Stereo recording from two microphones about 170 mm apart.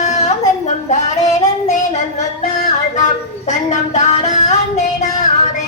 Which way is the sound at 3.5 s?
45° left (ahead or behind).